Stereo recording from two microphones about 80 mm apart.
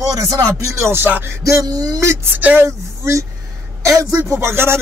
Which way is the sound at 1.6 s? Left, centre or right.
Right.